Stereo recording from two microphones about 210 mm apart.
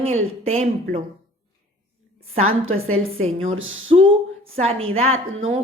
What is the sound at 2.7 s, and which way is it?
Speech, 75° right (ahead or behind).